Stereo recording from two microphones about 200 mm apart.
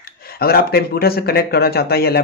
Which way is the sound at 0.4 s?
50° left (ahead or behind).